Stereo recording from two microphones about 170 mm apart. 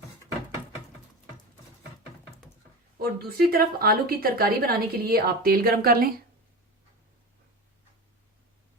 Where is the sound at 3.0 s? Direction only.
60° right (ahead or behind).